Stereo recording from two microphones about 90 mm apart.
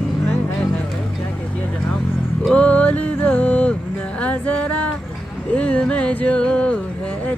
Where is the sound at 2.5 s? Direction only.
15° left (ahead or behind).